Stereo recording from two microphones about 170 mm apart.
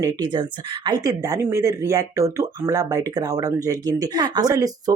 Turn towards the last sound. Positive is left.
turn(degrees=-20)  # may be behind; listen again after turning